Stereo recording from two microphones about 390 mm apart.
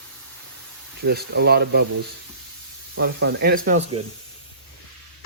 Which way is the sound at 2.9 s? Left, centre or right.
Right.